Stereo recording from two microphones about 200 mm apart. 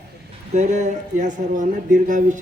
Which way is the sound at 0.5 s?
35° right (ahead or behind).